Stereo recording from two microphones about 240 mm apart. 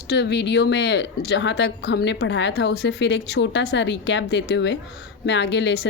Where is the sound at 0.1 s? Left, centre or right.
Left.